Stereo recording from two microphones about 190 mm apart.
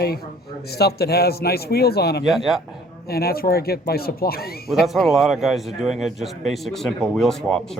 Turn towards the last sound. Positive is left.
turn(degrees=0)  # may be behind; listen again after turning